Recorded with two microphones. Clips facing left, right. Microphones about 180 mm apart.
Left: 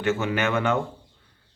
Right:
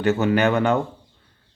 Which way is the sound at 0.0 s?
40° right (ahead or behind).